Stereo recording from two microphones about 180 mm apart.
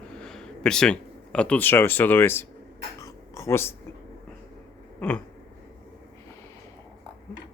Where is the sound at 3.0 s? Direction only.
15° left (ahead or behind).